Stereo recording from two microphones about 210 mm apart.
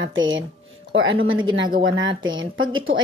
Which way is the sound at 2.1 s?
20° right (ahead or behind).